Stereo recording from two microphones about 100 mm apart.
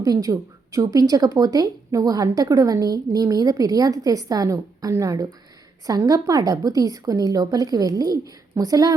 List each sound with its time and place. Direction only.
0.0 s a woman's voice: 35° right (ahead or behind)